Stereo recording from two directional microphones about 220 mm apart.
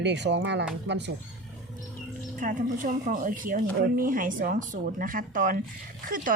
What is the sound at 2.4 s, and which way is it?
Speech, 40° right (ahead or behind).